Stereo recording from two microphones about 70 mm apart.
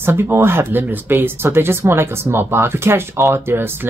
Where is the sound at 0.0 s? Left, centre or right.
Right.